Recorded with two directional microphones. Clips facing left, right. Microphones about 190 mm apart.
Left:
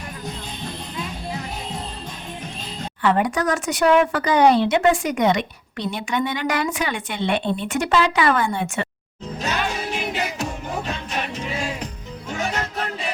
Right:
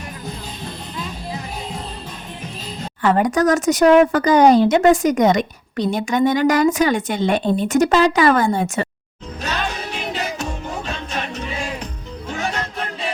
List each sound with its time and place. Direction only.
3.0 s speech: 40° right (ahead or behind)